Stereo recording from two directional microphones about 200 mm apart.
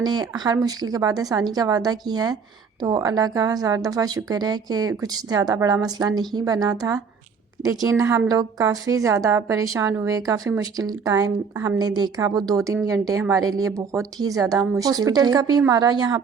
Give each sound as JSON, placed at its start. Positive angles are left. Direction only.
{"t": 0.0, "sound": "a woman's voice", "side_deg": -20}